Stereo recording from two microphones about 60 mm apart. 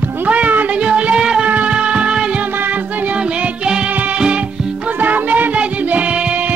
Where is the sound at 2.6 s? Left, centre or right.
Right.